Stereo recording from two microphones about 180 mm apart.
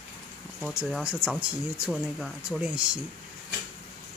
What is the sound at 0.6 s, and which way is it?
Speech, centre (ahead or behind).